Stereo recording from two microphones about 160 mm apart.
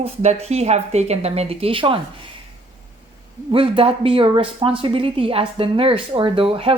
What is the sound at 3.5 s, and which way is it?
A woman's voice, 35° right (ahead or behind).